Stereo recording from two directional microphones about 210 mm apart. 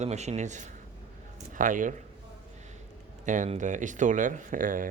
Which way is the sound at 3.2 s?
35° right (ahead or behind).